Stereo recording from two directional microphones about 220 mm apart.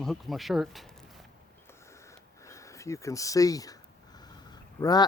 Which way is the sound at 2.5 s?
15° left (ahead or behind).